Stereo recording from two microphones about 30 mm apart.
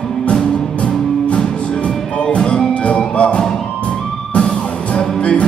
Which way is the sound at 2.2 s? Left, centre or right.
Left.